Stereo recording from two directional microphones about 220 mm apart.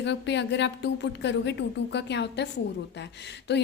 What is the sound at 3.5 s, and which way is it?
Speech, 50° left (ahead or behind).